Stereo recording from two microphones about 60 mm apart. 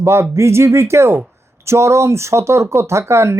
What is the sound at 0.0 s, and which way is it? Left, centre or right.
Speech, right.